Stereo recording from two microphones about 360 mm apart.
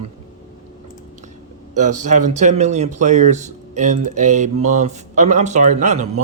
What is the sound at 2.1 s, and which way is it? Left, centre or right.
Speech, centre.